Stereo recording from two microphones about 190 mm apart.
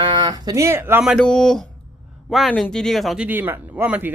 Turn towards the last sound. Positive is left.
turn(degrees=-10)  # may be behind; listen again after turning